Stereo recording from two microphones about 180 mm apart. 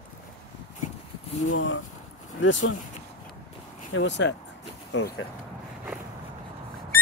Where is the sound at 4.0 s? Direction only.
80° left.